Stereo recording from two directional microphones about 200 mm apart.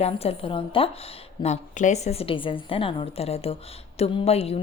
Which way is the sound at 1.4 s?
35° left (ahead or behind).